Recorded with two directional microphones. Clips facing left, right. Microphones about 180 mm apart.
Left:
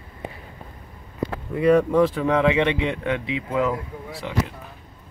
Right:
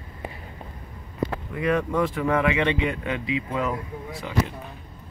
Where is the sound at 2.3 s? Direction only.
20° left (ahead or behind).